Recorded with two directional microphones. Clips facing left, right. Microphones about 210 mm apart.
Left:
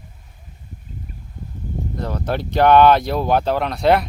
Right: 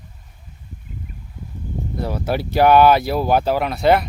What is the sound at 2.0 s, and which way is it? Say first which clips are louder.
Speech: right 2 dB; 10° right (ahead or behind).